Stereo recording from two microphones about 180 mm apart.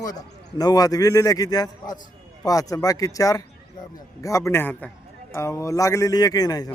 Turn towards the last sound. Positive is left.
turn(degrees=20)  # may be behind; listen again after turning